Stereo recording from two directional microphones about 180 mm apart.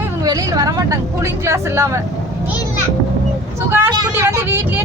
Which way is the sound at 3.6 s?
10° right (ahead or behind).